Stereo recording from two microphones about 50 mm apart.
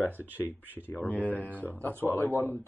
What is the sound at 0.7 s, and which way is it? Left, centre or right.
Speech, right.